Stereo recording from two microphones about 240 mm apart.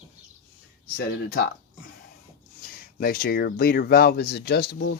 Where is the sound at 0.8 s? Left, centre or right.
Left.